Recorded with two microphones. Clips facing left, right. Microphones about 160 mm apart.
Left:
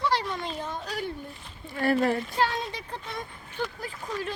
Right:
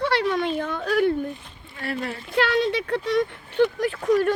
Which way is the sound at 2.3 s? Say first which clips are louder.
Right 7 dB; 75° right (ahead or behind).